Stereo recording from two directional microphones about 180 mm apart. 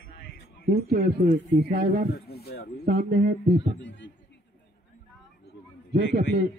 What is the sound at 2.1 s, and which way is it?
Speech, 60° left (ahead or behind).